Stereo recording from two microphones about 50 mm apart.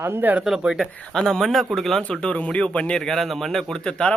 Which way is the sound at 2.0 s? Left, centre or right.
Left.